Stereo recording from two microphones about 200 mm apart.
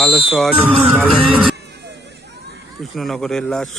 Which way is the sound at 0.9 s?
10° right (ahead or behind).